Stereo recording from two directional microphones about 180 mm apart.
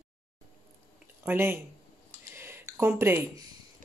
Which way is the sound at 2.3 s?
15° right (ahead or behind).